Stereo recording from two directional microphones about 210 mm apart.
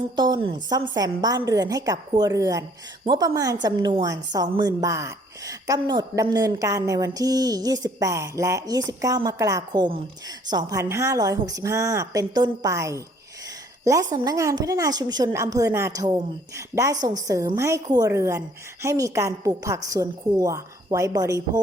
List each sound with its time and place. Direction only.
0.2 s a woman's voice: 25° right (ahead or behind)